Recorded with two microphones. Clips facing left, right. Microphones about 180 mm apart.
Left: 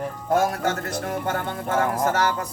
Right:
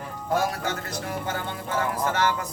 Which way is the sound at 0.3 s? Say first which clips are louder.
Left 4 dB; 50° left (ahead or behind).